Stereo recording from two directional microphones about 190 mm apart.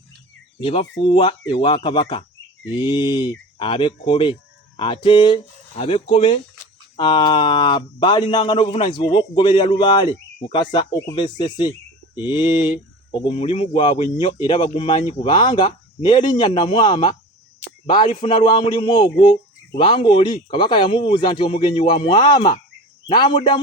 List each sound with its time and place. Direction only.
0.6 s speech: 30° left (ahead or behind)